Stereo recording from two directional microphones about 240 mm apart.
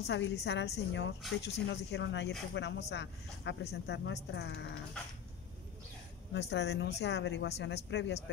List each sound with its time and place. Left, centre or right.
0.0 s speech: left
6.3 s speech: left